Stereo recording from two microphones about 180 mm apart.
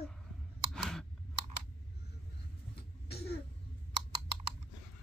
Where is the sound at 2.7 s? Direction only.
65° left (ahead or behind).